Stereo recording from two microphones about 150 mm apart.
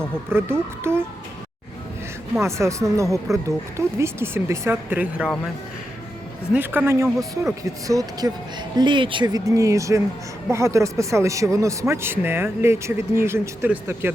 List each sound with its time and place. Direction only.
0.3 s a man's voice: 15° right (ahead or behind)
2.4 s speech: 20° right (ahead or behind)
6.5 s a man's voice: 15° right (ahead or behind)